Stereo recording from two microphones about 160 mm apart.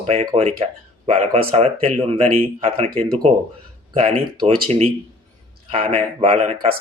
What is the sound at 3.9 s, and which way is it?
Speech, 30° right (ahead or behind).